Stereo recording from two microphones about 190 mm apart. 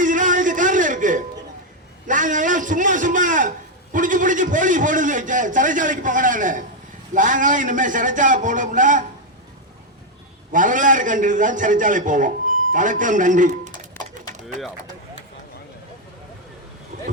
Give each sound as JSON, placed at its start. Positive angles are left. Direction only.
{"t": 0.0, "sound": "a sound", "side_deg": -45}
{"t": 3.9, "sound": "a man's voice", "side_deg": -45}
{"t": 10.5, "sound": "a man's voice", "side_deg": -45}
{"t": 14.0, "sound": "bird", "side_deg": 10}